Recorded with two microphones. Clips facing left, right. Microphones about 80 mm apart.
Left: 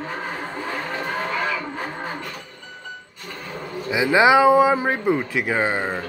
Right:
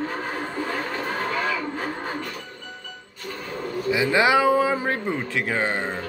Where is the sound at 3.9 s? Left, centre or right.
Centre.